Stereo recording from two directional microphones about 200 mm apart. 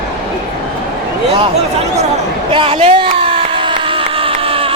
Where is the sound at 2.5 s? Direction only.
25° right (ahead or behind).